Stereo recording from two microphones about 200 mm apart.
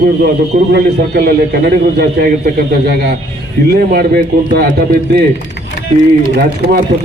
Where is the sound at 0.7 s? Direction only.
50° right (ahead or behind).